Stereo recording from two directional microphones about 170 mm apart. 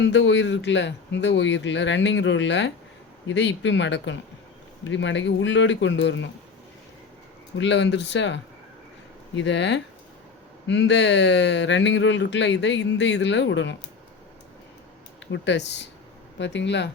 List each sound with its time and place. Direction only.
0.0 s speech: 90° left
7.6 s speech: 90° left
15.3 s speech: 90° left